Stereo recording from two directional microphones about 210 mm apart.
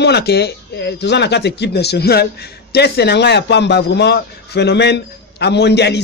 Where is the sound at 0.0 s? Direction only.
50° left (ahead or behind).